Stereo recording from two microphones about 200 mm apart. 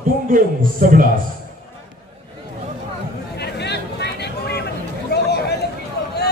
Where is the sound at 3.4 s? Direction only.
55° left (ahead or behind).